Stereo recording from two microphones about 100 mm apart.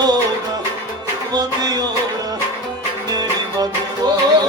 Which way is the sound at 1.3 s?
40° right (ahead or behind).